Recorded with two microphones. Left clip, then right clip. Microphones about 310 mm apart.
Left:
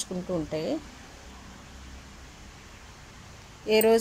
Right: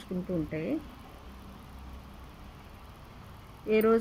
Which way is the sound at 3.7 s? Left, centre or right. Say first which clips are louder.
Left 4 dB; left.